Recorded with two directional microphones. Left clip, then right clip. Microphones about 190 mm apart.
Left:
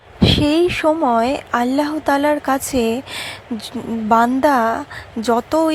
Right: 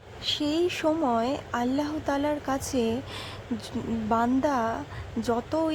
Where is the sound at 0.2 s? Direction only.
25° left (ahead or behind).